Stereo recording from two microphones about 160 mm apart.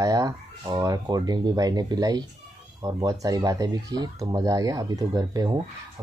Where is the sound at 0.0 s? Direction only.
20° right (ahead or behind).